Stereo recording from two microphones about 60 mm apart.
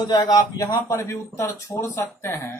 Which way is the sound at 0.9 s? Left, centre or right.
Left.